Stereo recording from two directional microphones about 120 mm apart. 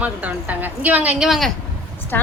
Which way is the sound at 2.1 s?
15° left (ahead or behind).